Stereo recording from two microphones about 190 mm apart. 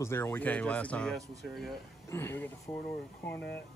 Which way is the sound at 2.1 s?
10° left (ahead or behind).